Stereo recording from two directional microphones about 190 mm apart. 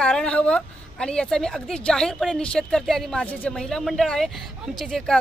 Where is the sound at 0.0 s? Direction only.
5° left (ahead or behind).